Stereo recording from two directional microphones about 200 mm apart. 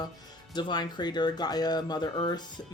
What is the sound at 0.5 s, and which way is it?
Speech, 20° left (ahead or behind).